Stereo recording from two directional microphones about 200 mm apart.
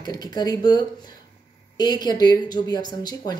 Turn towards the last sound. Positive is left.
turn(degrees=20)  # may be behind; listen again after turning